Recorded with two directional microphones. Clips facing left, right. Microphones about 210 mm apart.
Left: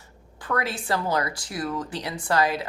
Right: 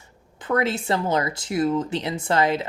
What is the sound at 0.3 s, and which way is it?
Speech, 20° right (ahead or behind).